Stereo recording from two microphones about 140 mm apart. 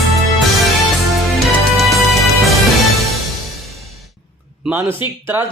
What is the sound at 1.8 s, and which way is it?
Music, centre (ahead or behind).